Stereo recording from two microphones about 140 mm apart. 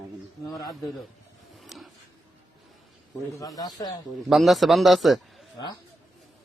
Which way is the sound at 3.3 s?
25° left (ahead or behind).